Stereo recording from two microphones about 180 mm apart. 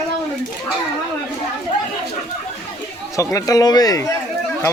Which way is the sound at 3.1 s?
20° left (ahead or behind).